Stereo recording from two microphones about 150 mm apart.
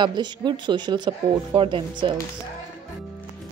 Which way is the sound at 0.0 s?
30° right (ahead or behind).